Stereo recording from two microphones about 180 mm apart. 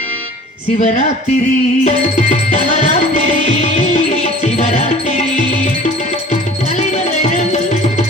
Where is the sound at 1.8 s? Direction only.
40° left (ahead or behind).